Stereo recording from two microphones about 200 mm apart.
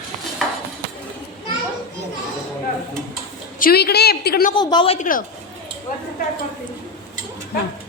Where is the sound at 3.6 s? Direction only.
50° left (ahead or behind).